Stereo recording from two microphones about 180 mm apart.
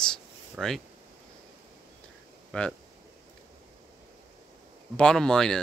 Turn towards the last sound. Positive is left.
turn(degrees=5)  # may be behind; listen again after turning